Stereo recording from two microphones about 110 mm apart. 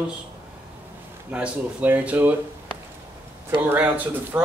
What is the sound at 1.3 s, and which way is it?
Speech, 10° right (ahead or behind).